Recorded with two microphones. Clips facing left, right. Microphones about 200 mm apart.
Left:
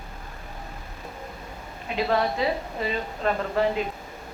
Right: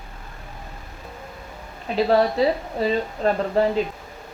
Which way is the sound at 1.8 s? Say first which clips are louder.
Right 6 dB; 35° right (ahead or behind).